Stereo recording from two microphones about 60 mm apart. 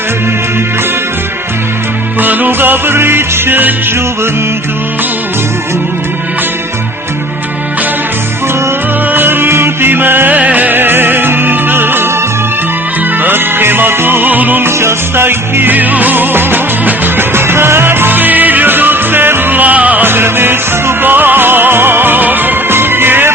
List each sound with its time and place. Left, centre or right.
2.2 s music: right
9.1 s music: right
13.2 s music: right
14.6 s music: right
20.1 s music: right